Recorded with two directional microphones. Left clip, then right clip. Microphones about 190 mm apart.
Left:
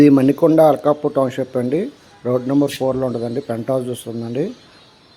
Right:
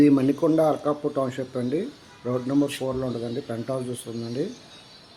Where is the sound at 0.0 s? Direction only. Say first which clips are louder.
Left 8 dB; 30° left (ahead or behind).